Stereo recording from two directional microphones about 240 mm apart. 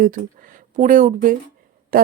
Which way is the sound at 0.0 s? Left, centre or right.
Right.